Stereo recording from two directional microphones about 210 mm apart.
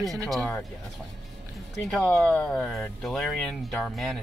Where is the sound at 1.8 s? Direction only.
5° left (ahead or behind).